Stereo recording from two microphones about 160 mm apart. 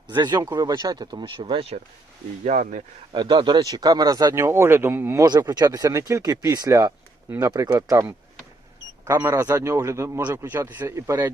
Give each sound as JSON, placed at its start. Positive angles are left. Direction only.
{"t": 0.1, "sound": "speech", "side_deg": -25}
{"t": 2.4, "sound": "speech", "side_deg": -50}
{"t": 3.1, "sound": "speech", "side_deg": -25}
{"t": 5.2, "sound": "speech", "side_deg": -25}
{"t": 9.0, "sound": "a man's voice", "side_deg": -15}